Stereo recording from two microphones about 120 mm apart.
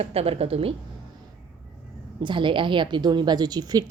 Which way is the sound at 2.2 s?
45° right (ahead or behind).